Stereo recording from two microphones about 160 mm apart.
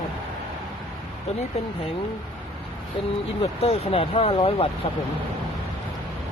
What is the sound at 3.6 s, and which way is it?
Speech, 40° left (ahead or behind).